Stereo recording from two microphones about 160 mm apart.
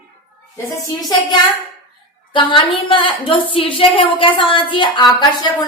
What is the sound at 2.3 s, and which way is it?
A woman's voice, 30° left (ahead or behind).